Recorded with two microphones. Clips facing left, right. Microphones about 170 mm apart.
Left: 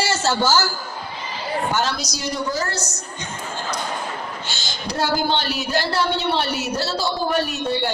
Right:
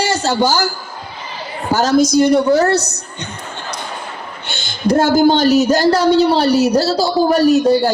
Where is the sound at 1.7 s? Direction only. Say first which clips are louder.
Right 11 dB; 40° right (ahead or behind); by 3.0 s 65° right (ahead or behind).